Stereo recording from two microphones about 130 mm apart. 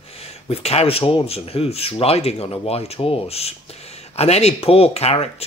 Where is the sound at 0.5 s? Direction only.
50° left (ahead or behind).